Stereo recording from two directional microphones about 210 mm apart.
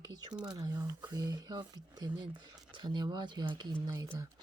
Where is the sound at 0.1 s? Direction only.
20° right (ahead or behind).